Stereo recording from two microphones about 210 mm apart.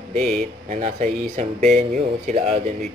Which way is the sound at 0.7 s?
35° right (ahead or behind).